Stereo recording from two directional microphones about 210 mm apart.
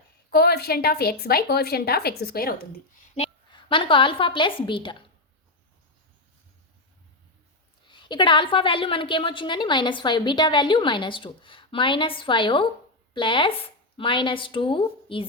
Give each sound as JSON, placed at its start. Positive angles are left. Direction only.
{"t": 0.3, "sound": "a woman's voice", "side_deg": 50}
{"t": 3.2, "sound": "a woman's voice", "side_deg": 25}
{"t": 7.9, "sound": "a woman's voice", "side_deg": 20}